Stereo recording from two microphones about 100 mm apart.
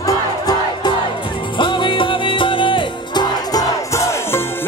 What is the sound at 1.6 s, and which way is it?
Music, 55° left (ahead or behind).